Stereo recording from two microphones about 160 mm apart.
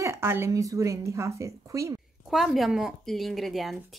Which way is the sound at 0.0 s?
15° right (ahead or behind).